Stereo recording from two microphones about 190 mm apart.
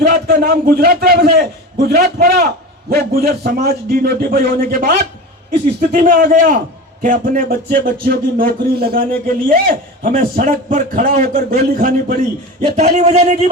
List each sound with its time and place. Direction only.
0.1 s a man's voice: 55° right (ahead or behind)
6.0 s speech: 45° right (ahead or behind)